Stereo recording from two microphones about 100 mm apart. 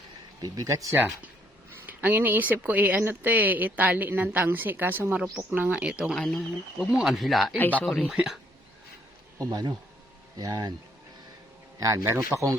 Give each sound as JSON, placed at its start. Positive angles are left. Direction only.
{"t": 0.4, "sound": "a man's voice", "side_deg": -35}
{"t": 0.9, "sound": "speech", "side_deg": -15}
{"t": 6.1, "sound": "speech", "side_deg": 5}
{"t": 8.0, "sound": "speech", "side_deg": -10}
{"t": 9.4, "sound": "a man's voice", "side_deg": -45}
{"t": 11.8, "sound": "a man's voice", "side_deg": -35}